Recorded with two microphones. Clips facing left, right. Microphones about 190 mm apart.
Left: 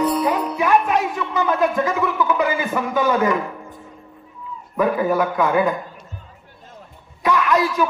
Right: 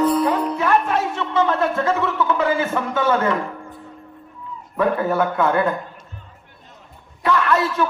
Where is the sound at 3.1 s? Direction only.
15° left (ahead or behind).